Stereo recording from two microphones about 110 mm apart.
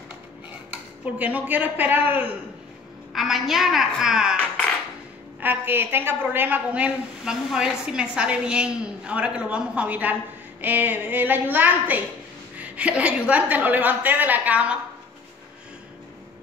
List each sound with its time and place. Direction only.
0.7 s speech: 15° right (ahead or behind)
3.1 s a woman's voice: centre (ahead or behind)
5.4 s a woman's voice: 20° right (ahead or behind)